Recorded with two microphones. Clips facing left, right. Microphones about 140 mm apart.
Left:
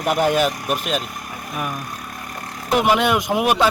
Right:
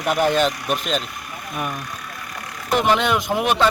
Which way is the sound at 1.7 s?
45° left (ahead or behind).